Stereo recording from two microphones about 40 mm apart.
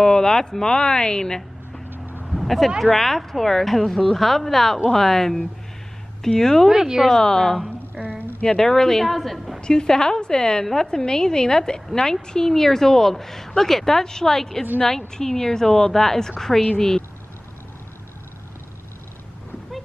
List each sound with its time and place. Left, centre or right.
0.0 s speech: centre
1.9 s vehicle: right
2.2 s a sound: centre
2.8 s a woman's voice: centre
6.7 s speech: centre
7.2 s a woman's voice: centre
7.9 s a sound: right
8.5 s a woman's voice: centre
9.6 s a woman's voice: left